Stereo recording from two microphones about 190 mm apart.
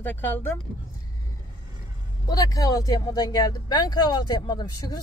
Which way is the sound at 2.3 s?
20° left (ahead or behind).